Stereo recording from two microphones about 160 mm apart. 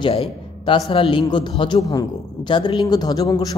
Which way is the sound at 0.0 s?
35° left (ahead or behind).